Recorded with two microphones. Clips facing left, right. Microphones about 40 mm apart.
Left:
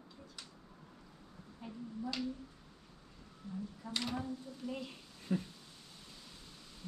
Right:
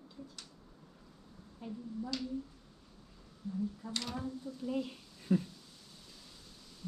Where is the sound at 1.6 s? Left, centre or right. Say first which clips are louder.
Right 1 dB; centre.